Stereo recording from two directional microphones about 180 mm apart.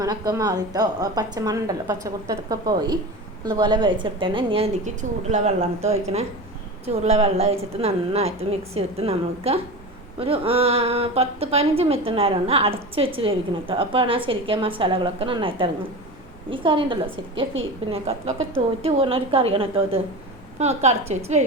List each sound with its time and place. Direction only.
0.0 s a woman's voice: 20° right (ahead or behind); by 21.4 s 35° right (ahead or behind)